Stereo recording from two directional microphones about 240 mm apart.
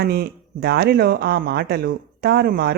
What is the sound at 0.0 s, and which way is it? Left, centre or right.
Speech, right.